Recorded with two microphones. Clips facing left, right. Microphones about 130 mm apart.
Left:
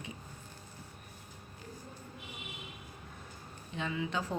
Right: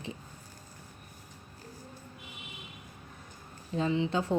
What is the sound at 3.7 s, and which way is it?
Speech, 30° right (ahead or behind).